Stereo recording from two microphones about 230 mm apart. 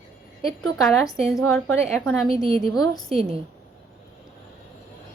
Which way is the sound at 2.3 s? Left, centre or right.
Right.